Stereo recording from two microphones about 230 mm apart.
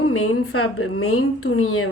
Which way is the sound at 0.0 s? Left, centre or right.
Left.